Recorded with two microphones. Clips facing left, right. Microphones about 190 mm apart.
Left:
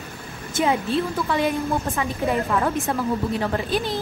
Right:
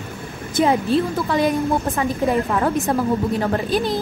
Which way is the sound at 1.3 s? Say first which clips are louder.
Right 5 dB; 35° right (ahead or behind).